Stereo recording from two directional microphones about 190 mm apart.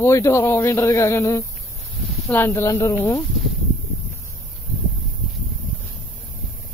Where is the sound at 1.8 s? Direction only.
Centre (ahead or behind).